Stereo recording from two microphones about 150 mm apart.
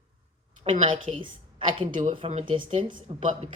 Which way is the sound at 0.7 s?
40° right (ahead or behind).